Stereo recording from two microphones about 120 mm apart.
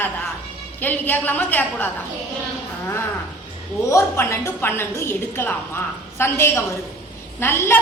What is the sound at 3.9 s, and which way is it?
A woman's voice, 20° left (ahead or behind).